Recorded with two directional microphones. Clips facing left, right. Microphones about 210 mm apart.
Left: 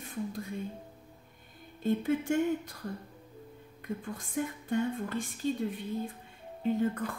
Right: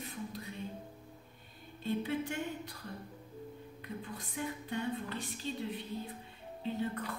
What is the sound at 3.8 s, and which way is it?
A woman's voice, 45° left (ahead or behind).